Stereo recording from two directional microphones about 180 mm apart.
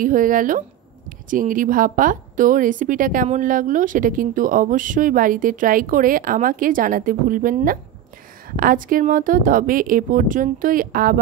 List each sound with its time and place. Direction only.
0.0 s speech: 50° right (ahead or behind)